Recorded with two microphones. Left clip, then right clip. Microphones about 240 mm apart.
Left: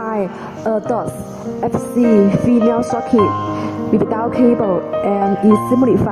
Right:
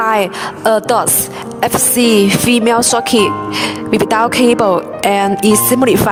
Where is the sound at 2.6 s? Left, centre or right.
Right.